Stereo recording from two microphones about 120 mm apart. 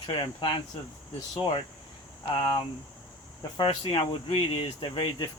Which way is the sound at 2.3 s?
40° left (ahead or behind).